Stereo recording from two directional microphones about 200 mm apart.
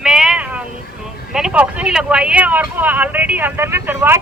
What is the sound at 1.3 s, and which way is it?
Speech, 5° right (ahead or behind).